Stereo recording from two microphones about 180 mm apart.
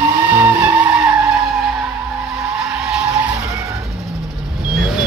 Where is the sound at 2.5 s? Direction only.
5° right (ahead or behind).